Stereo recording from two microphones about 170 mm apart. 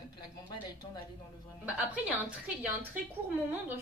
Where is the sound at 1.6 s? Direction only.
5° right (ahead or behind).